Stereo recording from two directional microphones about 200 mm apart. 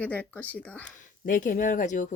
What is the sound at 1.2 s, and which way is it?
Speech, 40° left (ahead or behind).